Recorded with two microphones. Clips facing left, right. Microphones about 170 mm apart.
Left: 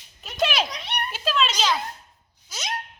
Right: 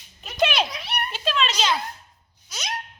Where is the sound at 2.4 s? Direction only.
Centre (ahead or behind).